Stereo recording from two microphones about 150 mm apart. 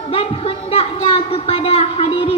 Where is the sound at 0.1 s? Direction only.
40° left (ahead or behind).